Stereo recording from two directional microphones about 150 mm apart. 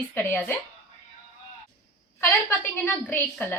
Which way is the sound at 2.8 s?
10° left (ahead or behind).